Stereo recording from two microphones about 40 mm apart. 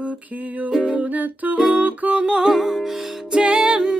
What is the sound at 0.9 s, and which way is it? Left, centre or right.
Music, right.